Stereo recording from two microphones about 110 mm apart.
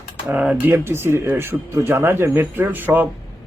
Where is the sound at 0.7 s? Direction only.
20° right (ahead or behind).